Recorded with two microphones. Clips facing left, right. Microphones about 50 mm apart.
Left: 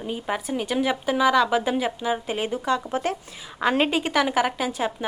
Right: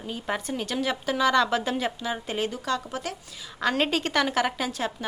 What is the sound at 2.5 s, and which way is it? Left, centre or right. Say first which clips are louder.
Speech: left 5 dB; left.